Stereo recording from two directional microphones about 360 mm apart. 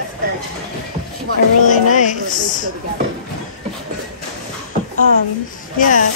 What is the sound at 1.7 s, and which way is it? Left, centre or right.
Speech, left.